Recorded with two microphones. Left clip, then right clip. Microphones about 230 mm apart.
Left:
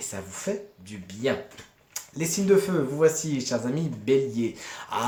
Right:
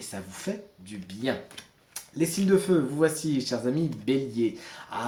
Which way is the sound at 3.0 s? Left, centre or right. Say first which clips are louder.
Left 3 dB; left.